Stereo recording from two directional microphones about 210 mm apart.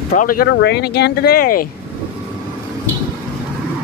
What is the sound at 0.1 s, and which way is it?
Speech, 40° left (ahead or behind).